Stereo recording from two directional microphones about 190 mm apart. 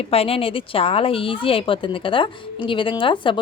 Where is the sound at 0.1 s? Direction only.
30° left (ahead or behind).